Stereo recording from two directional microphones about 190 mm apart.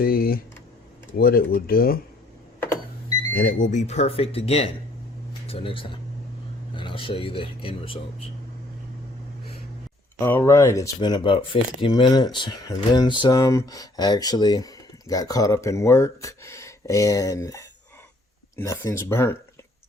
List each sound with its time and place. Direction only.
0.0 s speech: 50° left (ahead or behind)
3.3 s speech: 45° left (ahead or behind)
10.2 s speech: 10° left (ahead or behind)